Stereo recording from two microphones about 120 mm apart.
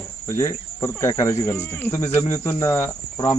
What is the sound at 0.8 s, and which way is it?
Cricket, 25° left (ahead or behind).